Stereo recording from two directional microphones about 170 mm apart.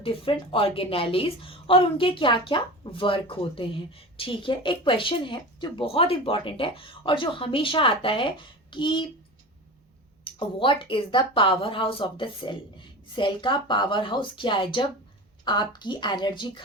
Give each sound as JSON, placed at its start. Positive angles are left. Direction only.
{"t": 0.0, "sound": "a woman's voice", "side_deg": 35}
{"t": 10.2, "sound": "a woman's voice", "side_deg": 30}